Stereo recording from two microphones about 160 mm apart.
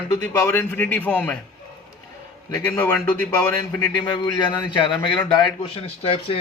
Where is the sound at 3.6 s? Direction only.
25° left (ahead or behind).